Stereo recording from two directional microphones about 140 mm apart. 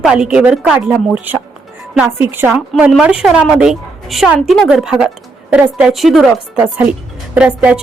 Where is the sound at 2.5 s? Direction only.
5° right (ahead or behind).